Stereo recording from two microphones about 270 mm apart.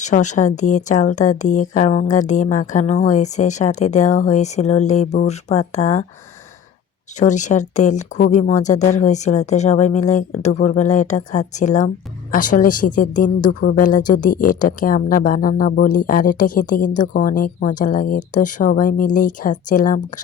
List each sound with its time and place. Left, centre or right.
0.0 s speech: left
7.2 s speech: left